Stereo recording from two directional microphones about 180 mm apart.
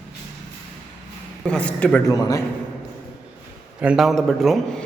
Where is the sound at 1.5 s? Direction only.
5° left (ahead or behind).